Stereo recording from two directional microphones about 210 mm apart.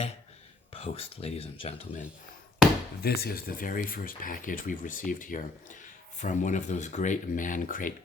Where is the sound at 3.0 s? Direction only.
45° left (ahead or behind).